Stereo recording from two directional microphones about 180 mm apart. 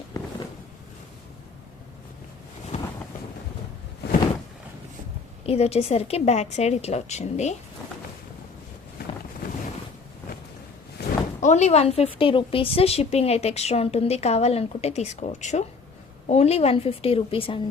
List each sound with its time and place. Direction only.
5.5 s a woman's voice: 35° left (ahead or behind)
11.0 s a sound: 65° left (ahead or behind)
11.3 s a woman's voice: 40° left (ahead or behind)